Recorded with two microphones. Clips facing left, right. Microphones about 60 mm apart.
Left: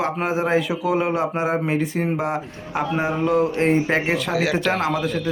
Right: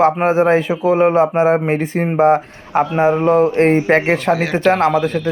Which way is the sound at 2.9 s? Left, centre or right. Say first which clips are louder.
Right 6 dB; right.